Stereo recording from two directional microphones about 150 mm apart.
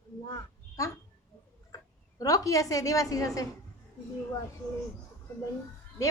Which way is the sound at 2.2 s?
25° left (ahead or behind).